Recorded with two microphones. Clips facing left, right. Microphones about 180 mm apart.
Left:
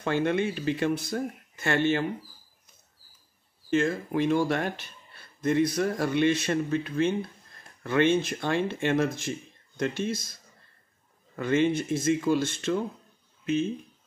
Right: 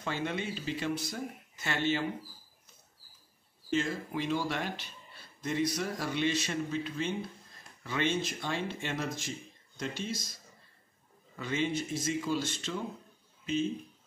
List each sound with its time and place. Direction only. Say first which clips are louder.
0.0 s speech: left 9 dB; 60° left (ahead or behind)
3.7 s speech: left 7 dB; 55° left (ahead or behind)
11.3 s speech: left 8 dB; 55° left (ahead or behind)